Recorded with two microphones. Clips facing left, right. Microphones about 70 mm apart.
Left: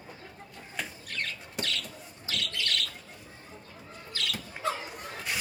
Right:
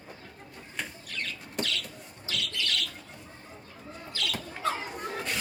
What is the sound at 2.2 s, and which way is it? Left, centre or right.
Bird, left.